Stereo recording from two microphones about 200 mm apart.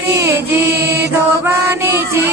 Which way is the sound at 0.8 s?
55° right (ahead or behind).